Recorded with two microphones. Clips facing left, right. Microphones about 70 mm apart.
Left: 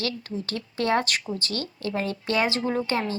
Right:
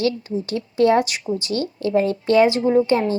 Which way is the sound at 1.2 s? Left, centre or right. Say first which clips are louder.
Right 8 dB; right.